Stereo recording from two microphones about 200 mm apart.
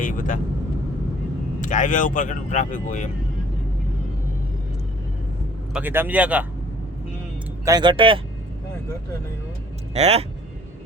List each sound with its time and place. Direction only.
0.0 s speech: 40° left (ahead or behind)
1.6 s speech: 40° left (ahead or behind)
5.7 s speech: 10° right (ahead or behind)
7.6 s speech: 20° right (ahead or behind)
9.9 s speech: 30° right (ahead or behind)